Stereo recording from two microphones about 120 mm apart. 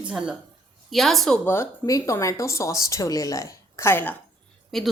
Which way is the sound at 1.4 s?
20° left (ahead or behind).